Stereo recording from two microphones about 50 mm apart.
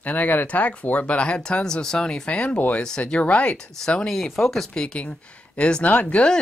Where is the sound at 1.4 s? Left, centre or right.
Centre.